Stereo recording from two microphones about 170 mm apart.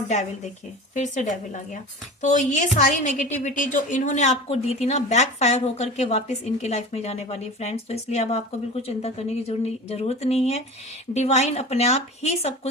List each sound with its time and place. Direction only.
0.9 s a woman's voice: 45° left (ahead or behind)